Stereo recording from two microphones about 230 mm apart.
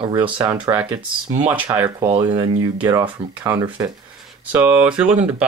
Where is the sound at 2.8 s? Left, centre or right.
Centre.